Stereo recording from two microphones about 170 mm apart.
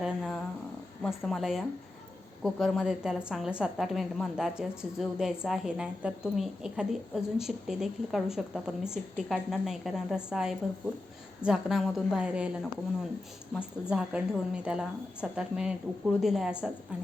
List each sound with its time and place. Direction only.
0.0 s purr: 5° left (ahead or behind)
1.0 s a woman's voice: centre (ahead or behind)
13.6 s a woman's voice: 5° right (ahead or behind)